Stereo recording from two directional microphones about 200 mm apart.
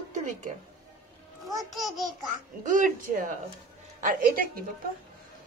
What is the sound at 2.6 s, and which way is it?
Speech, 40° right (ahead or behind).